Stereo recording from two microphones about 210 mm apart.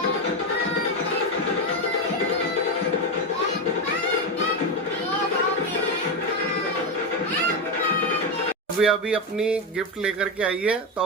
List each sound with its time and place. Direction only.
8.8 s speech: 5° right (ahead or behind)